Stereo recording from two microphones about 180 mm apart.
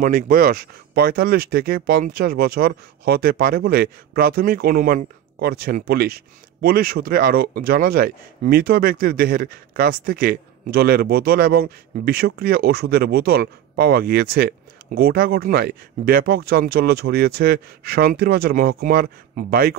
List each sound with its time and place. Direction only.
0.0 s speech: 50° right (ahead or behind)